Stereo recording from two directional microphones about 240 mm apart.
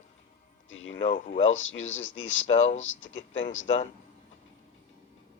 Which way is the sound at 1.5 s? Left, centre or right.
Left.